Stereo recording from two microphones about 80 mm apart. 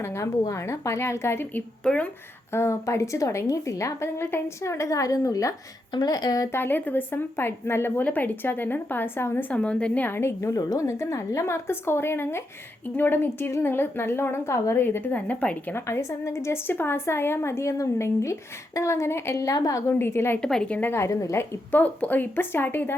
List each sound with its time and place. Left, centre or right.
0.0 s a woman's voice: left
1.8 s speech: centre
2.5 s a woman's voice: left
5.9 s speech: left
6.5 s a woman's voice: left
9.5 s a woman's voice: centre
10.5 s speech: left
10.8 s a woman's voice: left; by 15.7 s centre
15.7 s a woman's voice: left
19.4 s speech: left
19.9 s a woman's voice: left
20.4 s speech: centre
20.9 s a woman's voice: left
21.7 s a woman's voice: left